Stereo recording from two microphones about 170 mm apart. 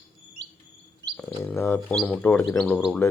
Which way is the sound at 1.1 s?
5° left (ahead or behind).